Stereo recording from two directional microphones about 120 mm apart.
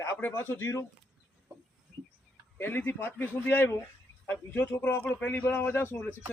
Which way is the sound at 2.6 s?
15° left (ahead or behind).